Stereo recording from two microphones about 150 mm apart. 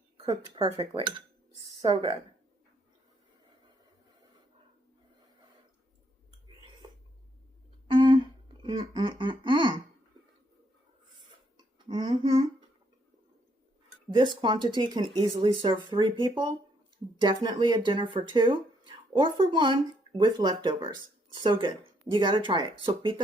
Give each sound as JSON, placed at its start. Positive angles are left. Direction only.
{"t": 0.2, "sound": "speech", "side_deg": -40}
{"t": 7.9, "sound": "a sound", "side_deg": -35}
{"t": 8.6, "sound": "speech", "side_deg": -35}
{"t": 11.9, "sound": "speech", "side_deg": -30}
{"t": 14.1, "sound": "speech", "side_deg": -30}